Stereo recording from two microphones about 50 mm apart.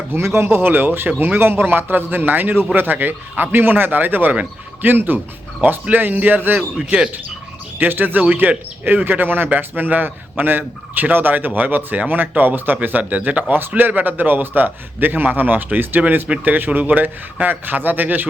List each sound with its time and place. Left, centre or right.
0.1 s speech: right
0.4 s a man's voice: right
6.7 s speech: centre
7.8 s a man's voice: right